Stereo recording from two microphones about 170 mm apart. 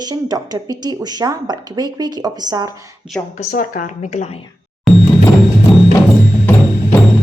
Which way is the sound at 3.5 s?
50° left (ahead or behind).